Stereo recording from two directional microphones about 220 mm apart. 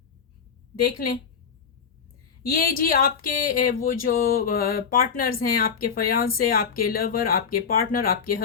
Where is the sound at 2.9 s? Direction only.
40° left (ahead or behind).